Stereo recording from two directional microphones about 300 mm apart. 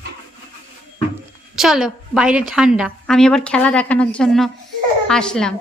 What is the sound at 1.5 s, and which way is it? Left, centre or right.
A woman's voice, centre.